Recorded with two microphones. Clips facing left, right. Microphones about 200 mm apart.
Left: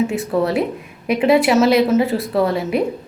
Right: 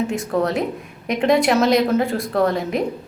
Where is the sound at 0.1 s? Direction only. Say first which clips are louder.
Left 2 dB; 5° left (ahead or behind).